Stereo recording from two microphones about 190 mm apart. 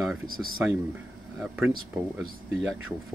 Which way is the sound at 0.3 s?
50° right (ahead or behind).